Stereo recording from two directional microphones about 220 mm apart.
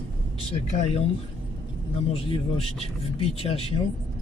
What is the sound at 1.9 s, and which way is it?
Speech, 25° left (ahead or behind).